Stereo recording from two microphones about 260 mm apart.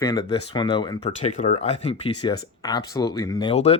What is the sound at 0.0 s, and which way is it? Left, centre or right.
Speech, centre.